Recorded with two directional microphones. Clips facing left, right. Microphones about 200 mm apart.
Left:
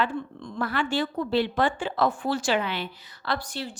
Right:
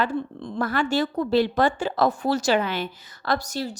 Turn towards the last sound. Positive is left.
turn(degrees=-40)  # may be behind; listen again after turning